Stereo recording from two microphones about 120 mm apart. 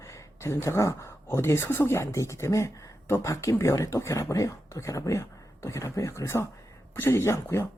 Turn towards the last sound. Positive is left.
turn(degrees=25)  # may be behind; listen again after turning